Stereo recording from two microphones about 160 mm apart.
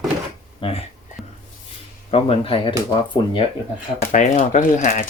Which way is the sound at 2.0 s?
35° left (ahead or behind).